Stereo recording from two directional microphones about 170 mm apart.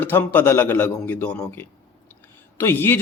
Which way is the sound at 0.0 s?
10° left (ahead or behind).